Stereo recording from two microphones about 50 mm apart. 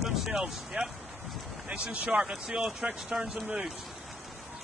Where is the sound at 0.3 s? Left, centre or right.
Centre.